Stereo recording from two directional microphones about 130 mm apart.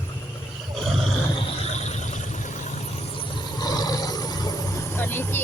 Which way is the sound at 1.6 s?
60° left (ahead or behind).